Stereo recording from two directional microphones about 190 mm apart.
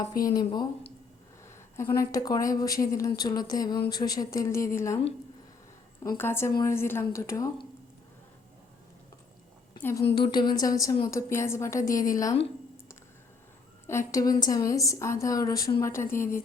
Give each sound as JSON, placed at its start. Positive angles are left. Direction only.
{"t": 0.0, "sound": "a woman's voice", "side_deg": 20}
{"t": 6.1, "sound": "speech", "side_deg": 10}
{"t": 10.2, "sound": "speech", "side_deg": 20}
{"t": 13.8, "sound": "speech", "side_deg": 15}